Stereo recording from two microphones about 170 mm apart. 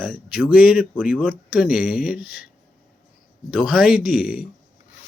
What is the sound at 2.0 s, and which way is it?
Speech, 60° left (ahead or behind).